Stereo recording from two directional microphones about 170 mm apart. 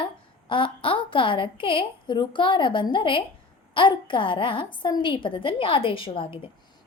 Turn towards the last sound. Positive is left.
turn(degrees=30)  # may be behind; listen again after turning